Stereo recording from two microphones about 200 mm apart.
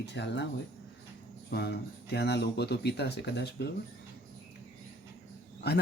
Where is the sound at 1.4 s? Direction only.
55° left (ahead or behind).